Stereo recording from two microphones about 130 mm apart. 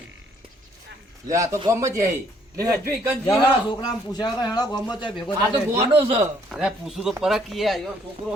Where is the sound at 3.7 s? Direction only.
30° left (ahead or behind).